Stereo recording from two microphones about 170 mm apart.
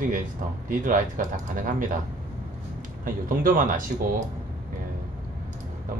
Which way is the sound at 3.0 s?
55° right (ahead or behind).